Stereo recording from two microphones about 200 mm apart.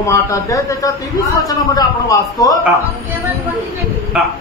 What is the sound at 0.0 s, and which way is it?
Speech, 15° left (ahead or behind).